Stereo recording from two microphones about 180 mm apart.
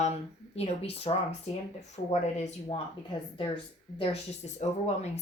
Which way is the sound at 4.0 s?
40° left (ahead or behind).